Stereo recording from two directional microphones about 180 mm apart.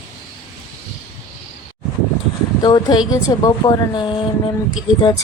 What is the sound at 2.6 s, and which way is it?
Speech, 20° left (ahead or behind).